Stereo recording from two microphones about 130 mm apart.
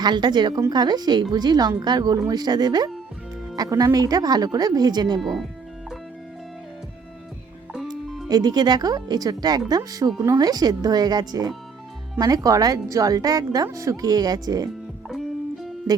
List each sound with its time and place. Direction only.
0.0 s a woman's voice: 35° right (ahead or behind)
5.2 s speech: centre (ahead or behind)
8.3 s a woman's voice: 30° right (ahead or behind)